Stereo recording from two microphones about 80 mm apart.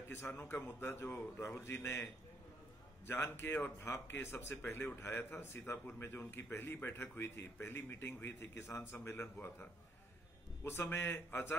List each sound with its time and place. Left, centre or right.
0.3 s a man's voice: left
3.1 s speech: left